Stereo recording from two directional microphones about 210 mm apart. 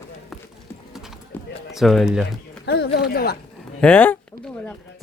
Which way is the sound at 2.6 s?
50° left (ahead or behind).